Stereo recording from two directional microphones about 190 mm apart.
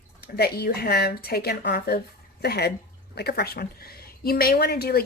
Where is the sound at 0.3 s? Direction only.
55° left (ahead or behind).